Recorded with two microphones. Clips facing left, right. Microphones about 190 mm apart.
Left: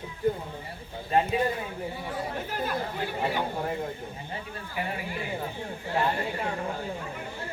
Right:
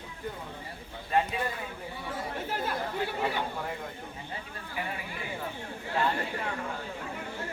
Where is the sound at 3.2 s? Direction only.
30° left (ahead or behind).